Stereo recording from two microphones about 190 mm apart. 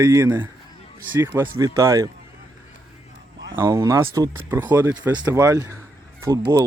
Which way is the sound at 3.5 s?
15° right (ahead or behind).